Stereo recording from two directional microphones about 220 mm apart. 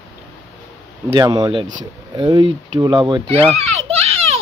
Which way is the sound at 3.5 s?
30° right (ahead or behind).